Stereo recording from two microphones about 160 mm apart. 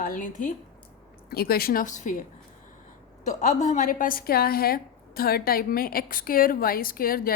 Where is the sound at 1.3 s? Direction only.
70° left (ahead or behind).